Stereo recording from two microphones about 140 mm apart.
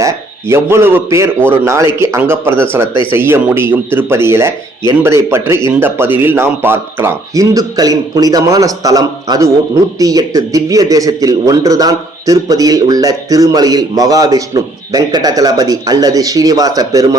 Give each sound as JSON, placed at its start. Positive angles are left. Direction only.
{"t": 0.5, "sound": "a man's voice", "side_deg": -15}